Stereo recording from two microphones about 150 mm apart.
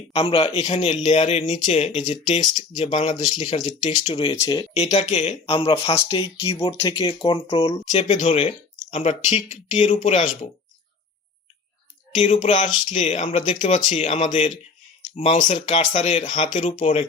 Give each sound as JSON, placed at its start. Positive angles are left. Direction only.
{"t": 0.1, "sound": "speech", "side_deg": 40}
{"t": 4.3, "sound": "speech", "side_deg": 20}
{"t": 4.5, "sound": "speech", "side_deg": 45}
{"t": 7.0, "sound": "speech", "side_deg": 30}
{"t": 7.9, "sound": "speech", "side_deg": 55}
{"t": 12.1, "sound": "speech", "side_deg": 55}